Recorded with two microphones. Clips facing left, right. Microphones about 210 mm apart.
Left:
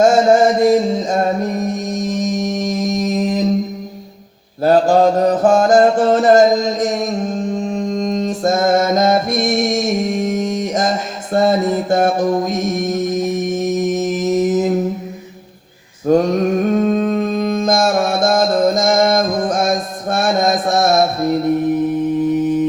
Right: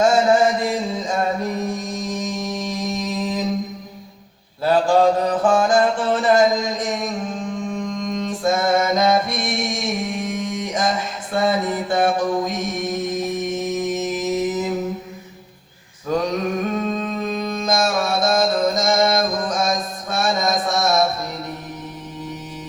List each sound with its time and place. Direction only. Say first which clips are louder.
0.0 s music: left 5 dB; 40° left (ahead or behind)
4.6 s mantra: left 4 dB; 40° left (ahead or behind)
16.0 s a sound: left 8 dB; 50° left (ahead or behind)
22.4 s music: left 19 dB; 55° left (ahead or behind)